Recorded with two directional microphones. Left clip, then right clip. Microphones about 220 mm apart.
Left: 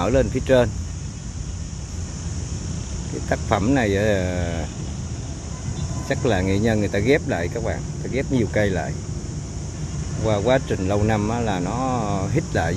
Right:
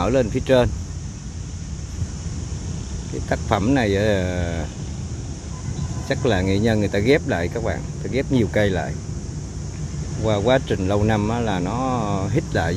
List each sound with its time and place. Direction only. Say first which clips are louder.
0.0 s speech: even; 5° right (ahead or behind)
3.3 s speech: even; 5° right (ahead or behind)
6.0 s speech: right 1 dB; 5° right (ahead or behind)
10.2 s speech: right 1 dB; 10° right (ahead or behind)